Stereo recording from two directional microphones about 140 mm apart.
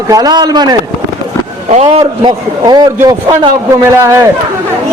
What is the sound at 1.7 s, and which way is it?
Speech, 55° right (ahead or behind).